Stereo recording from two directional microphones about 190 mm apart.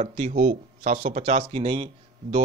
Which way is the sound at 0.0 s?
40° right (ahead or behind).